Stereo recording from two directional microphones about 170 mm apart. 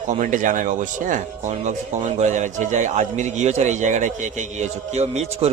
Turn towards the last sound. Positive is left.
turn(degrees=-40)  # may be behind; listen again after turning